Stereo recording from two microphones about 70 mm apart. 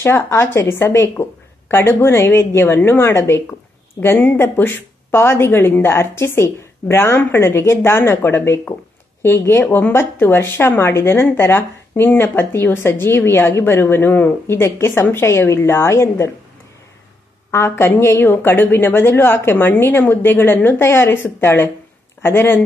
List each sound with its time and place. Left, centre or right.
0.0 s a woman's voice: left
4.0 s a woman's voice: left
17.5 s a woman's voice: left